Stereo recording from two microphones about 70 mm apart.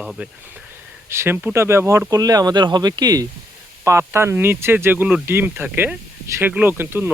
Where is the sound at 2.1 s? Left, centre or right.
Right.